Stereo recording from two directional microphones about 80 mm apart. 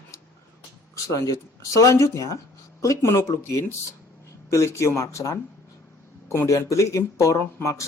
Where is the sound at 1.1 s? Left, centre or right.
Left.